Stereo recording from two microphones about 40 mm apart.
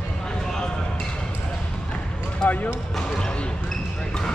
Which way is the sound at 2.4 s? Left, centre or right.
Centre.